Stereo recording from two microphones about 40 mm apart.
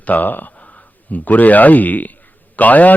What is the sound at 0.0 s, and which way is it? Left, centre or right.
A man's voice, left.